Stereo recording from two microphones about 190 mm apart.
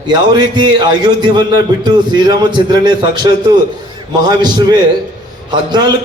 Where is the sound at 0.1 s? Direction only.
25° right (ahead or behind).